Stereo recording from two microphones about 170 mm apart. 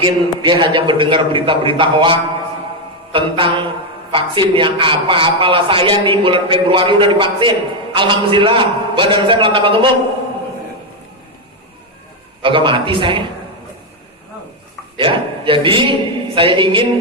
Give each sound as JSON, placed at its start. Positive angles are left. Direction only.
{"t": 0.0, "sound": "a man's voice", "side_deg": -30}
{"t": 12.4, "sound": "a man's voice", "side_deg": -30}
{"t": 14.9, "sound": "a man's voice", "side_deg": -30}